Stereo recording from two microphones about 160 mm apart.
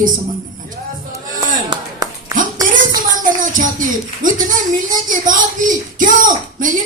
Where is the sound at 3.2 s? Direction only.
55° right (ahead or behind).